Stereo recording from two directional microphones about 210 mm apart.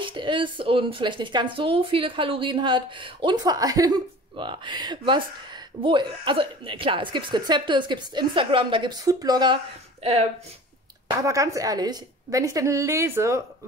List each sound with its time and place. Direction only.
0.0 s speech: 25° right (ahead or behind)
11.2 s a woman's voice: 15° right (ahead or behind)